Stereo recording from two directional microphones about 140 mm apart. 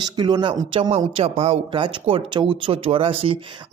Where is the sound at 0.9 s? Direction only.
45° right (ahead or behind).